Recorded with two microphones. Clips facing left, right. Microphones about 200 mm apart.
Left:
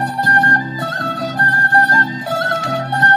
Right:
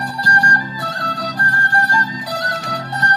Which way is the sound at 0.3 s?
20° left (ahead or behind).